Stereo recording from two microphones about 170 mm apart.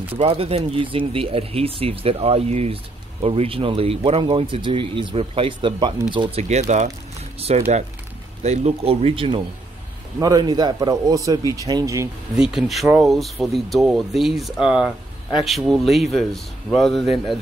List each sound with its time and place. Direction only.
0.2 s a man's voice: 35° right (ahead or behind)
6.5 s a man's voice: 45° right (ahead or behind); by 12.1 s 15° right (ahead or behind)
12.4 s speech: 5° right (ahead or behind)